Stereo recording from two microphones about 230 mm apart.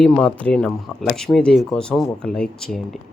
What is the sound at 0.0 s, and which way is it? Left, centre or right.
Speech, centre.